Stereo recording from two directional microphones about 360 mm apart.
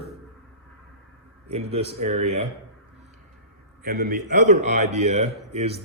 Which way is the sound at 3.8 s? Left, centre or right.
Right.